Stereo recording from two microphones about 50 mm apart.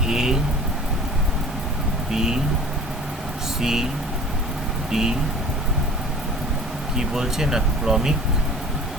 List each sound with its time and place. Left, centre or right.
0.1 s vehicle: centre
2.1 s speech: centre
3.6 s speech: centre
4.9 s speech: centre
6.9 s speech: centre